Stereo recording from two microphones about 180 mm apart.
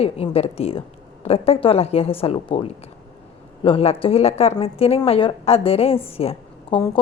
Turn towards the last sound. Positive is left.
turn(degrees=30)  # may be behind; listen again after turning